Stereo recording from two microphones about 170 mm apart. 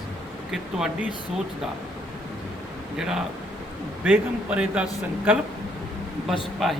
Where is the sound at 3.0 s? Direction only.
5° right (ahead or behind).